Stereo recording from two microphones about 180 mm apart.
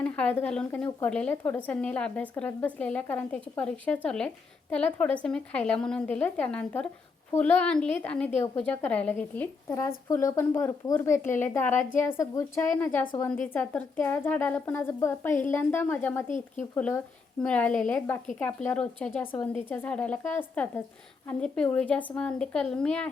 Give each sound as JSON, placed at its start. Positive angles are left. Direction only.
{"t": 0.0, "sound": "a woman's voice", "side_deg": 5}